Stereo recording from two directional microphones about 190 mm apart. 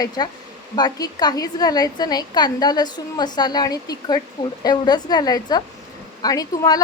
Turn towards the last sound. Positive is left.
turn(degrees=20)  # may be behind; listen again after turning